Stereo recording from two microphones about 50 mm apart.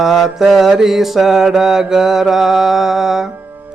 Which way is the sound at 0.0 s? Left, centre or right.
Centre.